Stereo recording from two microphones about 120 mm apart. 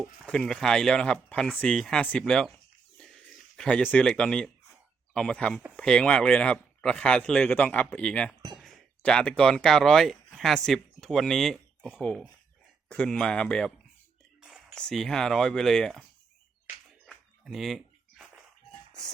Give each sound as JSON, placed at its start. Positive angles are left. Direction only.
{"t": 0.3, "sound": "speech", "side_deg": 5}
{"t": 14.8, "sound": "speech", "side_deg": 5}
{"t": 17.1, "sound": "a sound", "side_deg": -5}